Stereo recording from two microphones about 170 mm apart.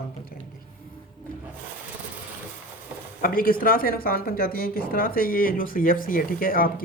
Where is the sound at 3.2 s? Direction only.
55° left (ahead or behind).